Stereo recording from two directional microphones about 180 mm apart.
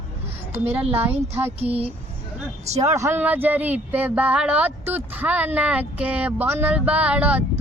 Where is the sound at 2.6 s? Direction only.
40° right (ahead or behind).